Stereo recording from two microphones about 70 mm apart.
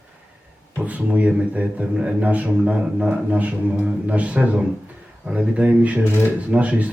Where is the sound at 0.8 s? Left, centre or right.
Right.